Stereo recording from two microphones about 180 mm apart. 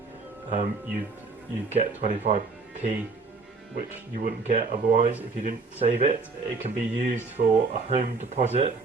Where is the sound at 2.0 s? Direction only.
40° right (ahead or behind).